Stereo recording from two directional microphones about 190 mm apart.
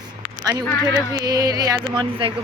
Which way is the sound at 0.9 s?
20° right (ahead or behind).